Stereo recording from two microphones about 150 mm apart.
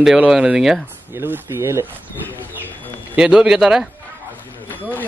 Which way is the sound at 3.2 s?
5° right (ahead or behind).